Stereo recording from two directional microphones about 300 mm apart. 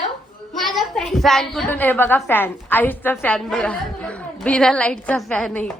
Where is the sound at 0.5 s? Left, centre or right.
Centre.